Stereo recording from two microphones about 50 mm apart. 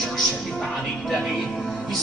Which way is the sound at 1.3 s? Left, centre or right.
Centre.